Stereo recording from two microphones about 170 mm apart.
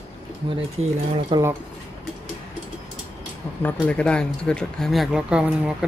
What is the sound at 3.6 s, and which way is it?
Speech, 10° left (ahead or behind).